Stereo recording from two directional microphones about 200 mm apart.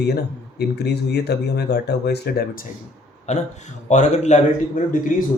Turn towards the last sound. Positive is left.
turn(degrees=40)  # may be behind; listen again after turning